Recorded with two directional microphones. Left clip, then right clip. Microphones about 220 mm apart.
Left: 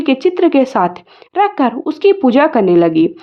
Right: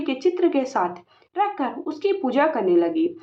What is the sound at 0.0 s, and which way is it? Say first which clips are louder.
A woman's voice: left 9 dB; 40° left (ahead or behind).